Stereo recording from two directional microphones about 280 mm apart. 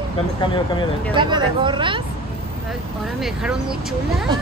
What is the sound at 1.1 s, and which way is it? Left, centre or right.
Speech, centre.